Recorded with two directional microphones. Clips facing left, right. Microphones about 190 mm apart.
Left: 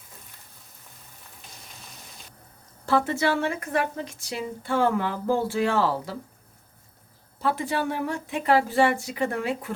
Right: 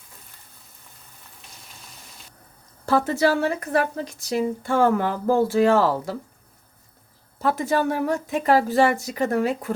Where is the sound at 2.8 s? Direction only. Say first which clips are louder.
Right 3 dB; 40° right (ahead or behind).